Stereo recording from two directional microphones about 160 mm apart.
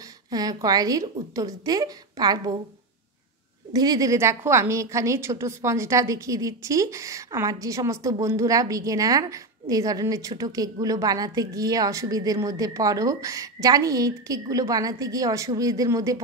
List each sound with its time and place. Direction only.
0.3 s a woman's voice: 25° right (ahead or behind)
3.7 s a woman's voice: 25° right (ahead or behind)